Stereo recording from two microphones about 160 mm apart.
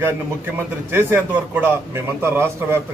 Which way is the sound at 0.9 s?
15° right (ahead or behind).